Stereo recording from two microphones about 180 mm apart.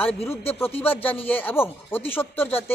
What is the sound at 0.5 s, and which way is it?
Speech, 10° left (ahead or behind).